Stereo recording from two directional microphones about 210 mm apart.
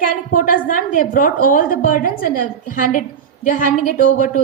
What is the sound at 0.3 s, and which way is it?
A woman's voice, 40° left (ahead or behind).